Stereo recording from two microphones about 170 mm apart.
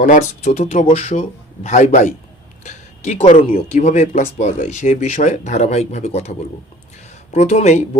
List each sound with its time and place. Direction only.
0.0 s speech: 45° left (ahead or behind)
7.3 s speech: 40° left (ahead or behind)